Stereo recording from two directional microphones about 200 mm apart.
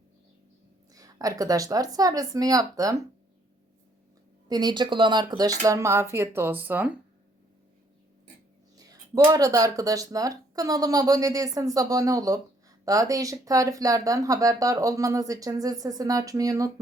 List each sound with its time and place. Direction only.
0.9 s speech: 15° right (ahead or behind)
4.4 s speech: 20° right (ahead or behind)
8.7 s speech: 20° right (ahead or behind)